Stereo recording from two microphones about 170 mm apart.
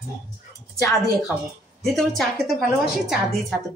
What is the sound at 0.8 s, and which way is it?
Speech, 20° left (ahead or behind).